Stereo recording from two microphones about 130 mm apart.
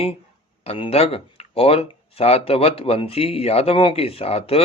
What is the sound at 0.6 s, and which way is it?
Speech, 50° left (ahead or behind).